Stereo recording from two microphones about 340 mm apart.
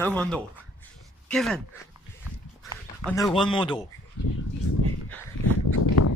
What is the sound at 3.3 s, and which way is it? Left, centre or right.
Speech, centre.